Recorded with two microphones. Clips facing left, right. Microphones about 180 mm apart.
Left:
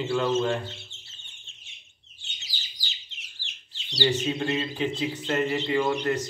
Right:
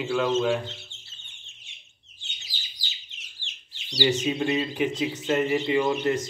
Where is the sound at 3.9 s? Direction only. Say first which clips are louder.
Right 2 dB; 15° right (ahead or behind).